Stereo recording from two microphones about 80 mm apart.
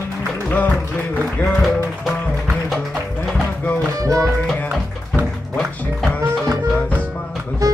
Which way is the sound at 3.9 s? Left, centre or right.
Right.